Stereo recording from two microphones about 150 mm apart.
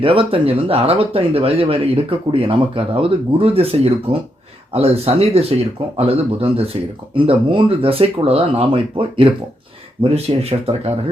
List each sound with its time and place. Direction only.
0.0 s speech: 35° right (ahead or behind)